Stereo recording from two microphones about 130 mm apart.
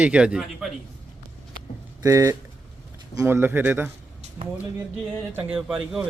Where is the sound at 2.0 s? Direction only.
25° right (ahead or behind).